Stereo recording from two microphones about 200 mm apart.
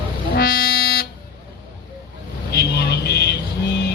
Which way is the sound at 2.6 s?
55° left (ahead or behind).